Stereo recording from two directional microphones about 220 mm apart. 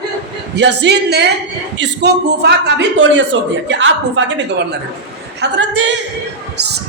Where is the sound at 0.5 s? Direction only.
50° right (ahead or behind).